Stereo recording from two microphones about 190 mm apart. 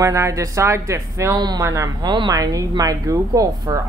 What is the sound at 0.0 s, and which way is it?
Speech, 15° right (ahead or behind).